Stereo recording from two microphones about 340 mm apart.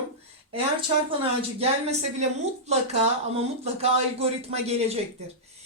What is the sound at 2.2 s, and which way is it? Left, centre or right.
A woman's voice, centre.